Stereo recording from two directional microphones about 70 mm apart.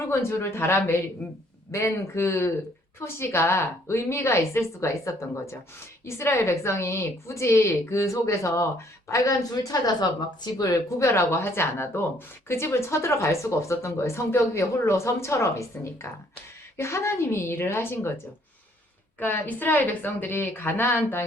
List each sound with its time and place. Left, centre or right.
0.1 s a woman's voice: left
10.7 s a woman's voice: left
19.2 s a woman's voice: left